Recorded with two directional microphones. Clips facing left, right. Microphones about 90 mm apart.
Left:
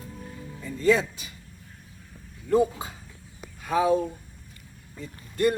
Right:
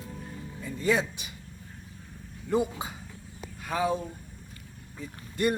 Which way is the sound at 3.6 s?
Centre (ahead or behind).